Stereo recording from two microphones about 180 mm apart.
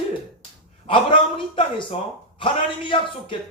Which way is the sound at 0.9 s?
30° left (ahead or behind).